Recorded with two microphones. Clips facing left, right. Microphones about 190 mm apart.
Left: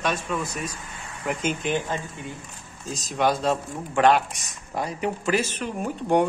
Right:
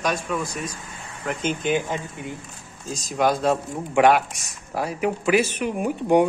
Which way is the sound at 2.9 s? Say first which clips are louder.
Right 2 dB; centre (ahead or behind).